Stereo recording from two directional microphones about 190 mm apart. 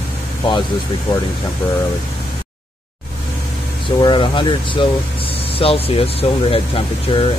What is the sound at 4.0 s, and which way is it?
Speech, 25° left (ahead or behind).